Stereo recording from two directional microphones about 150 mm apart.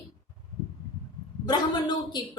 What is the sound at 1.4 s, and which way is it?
Speech, 30° left (ahead or behind).